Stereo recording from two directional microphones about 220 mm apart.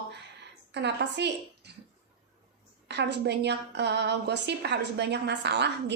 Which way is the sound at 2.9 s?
50° right (ahead or behind).